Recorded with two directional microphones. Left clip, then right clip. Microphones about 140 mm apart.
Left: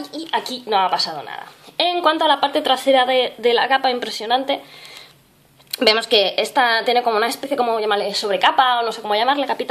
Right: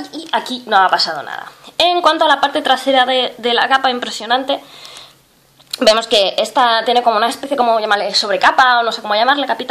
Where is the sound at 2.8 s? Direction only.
60° left (ahead or behind).